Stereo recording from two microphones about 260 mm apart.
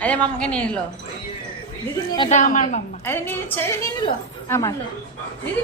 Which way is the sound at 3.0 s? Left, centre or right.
Centre.